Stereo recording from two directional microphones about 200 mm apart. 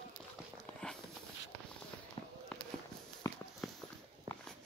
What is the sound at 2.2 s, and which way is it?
Fireworks, 30° left (ahead or behind).